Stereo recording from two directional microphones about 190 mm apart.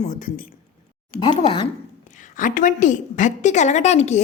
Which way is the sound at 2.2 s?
45° left (ahead or behind).